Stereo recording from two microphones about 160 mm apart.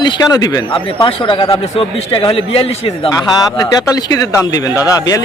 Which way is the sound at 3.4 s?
20° left (ahead or behind).